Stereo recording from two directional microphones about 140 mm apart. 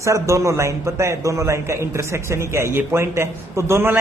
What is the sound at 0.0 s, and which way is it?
A man's voice, 20° right (ahead or behind).